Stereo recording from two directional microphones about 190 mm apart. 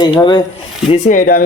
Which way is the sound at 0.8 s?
40° left (ahead or behind).